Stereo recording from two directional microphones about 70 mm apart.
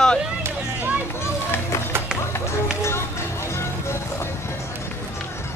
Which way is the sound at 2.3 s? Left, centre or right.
Left.